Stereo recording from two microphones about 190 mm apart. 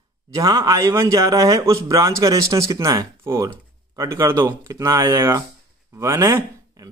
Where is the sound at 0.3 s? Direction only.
20° right (ahead or behind).